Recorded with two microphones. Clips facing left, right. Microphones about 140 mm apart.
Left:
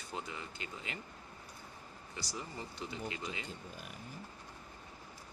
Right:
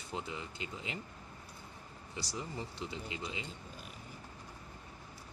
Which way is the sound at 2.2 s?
25° right (ahead or behind).